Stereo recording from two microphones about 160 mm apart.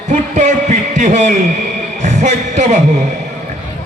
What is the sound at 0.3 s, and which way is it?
A man's voice, 50° right (ahead or behind).